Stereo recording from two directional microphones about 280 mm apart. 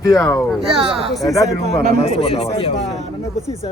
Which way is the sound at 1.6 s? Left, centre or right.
Left.